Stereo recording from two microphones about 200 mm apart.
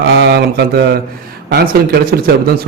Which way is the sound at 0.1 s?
55° right (ahead or behind).